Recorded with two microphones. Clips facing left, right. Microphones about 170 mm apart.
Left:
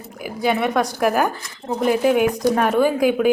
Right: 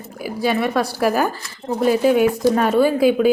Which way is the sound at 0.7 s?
5° right (ahead or behind).